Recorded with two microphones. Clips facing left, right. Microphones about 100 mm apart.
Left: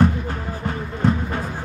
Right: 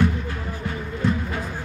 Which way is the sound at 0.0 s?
45° left (ahead or behind).